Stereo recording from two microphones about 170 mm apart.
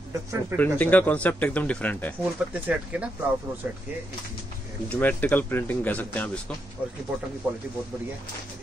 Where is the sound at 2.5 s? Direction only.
10° right (ahead or behind).